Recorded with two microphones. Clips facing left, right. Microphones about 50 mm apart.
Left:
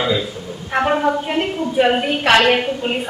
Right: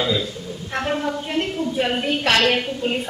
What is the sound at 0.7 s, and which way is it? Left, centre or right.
A woman's voice, left.